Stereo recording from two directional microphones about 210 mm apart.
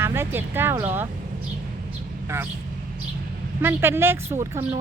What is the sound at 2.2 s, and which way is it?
Speech, 10° right (ahead or behind).